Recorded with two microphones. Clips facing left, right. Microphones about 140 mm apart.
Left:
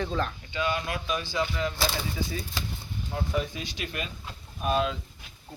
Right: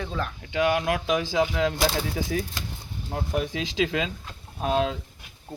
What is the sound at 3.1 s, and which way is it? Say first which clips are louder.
Speech: right 2 dB; 55° right (ahead or behind).